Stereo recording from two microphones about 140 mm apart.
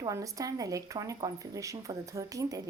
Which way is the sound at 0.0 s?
25° right (ahead or behind).